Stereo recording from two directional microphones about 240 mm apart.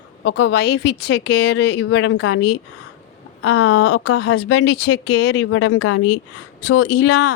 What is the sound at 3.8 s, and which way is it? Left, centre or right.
Speech, left.